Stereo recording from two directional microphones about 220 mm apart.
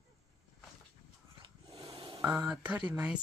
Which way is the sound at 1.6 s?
20° right (ahead or behind).